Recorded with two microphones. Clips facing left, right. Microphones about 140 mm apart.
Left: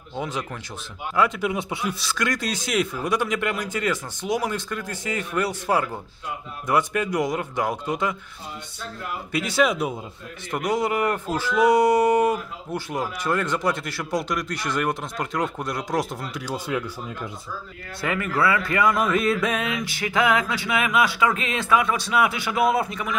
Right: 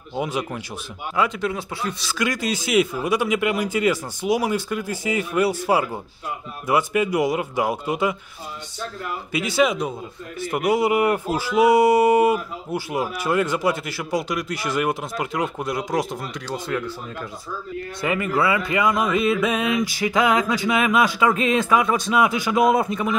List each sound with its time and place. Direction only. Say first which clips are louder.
0.1 s speech: right 4 dB; 10° right (ahead or behind)
1.4 s speech: even; 20° left (ahead or behind)
1.9 s speech: right 3 dB; centre (ahead or behind)
9.3 s speech: right 1 dB; centre (ahead or behind)
10.4 s speech: right 4 dB; 10° right (ahead or behind); by 16.8 s 10° left (ahead or behind)
18.0 s a man's voice: right 2 dB; 15° right (ahead or behind)